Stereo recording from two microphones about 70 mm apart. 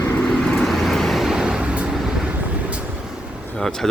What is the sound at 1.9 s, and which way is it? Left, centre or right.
Vehicle, centre.